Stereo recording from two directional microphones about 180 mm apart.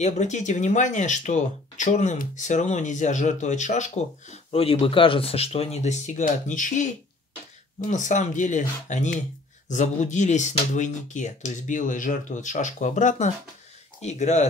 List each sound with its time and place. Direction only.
0.0 s speech: 40° left (ahead or behind)